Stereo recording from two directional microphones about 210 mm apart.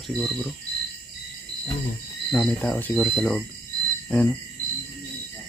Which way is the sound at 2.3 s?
5° left (ahead or behind).